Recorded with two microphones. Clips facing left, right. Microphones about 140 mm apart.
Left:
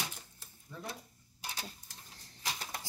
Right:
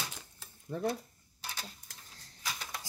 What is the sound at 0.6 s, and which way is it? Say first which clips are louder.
Speech: right 11 dB; 45° right (ahead or behind).